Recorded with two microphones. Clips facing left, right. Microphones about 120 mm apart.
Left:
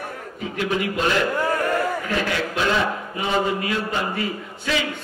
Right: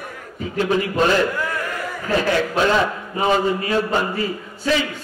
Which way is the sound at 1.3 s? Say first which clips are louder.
Left 3 dB; 35° left (ahead or behind).